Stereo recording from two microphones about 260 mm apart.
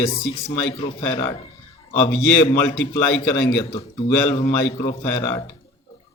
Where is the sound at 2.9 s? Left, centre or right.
Left.